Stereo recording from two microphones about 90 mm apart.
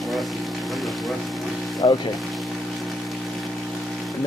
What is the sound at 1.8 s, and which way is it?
Speech, 55° left (ahead or behind).